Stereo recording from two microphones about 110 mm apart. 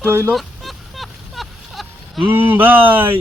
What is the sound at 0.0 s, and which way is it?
Speech, 20° right (ahead or behind).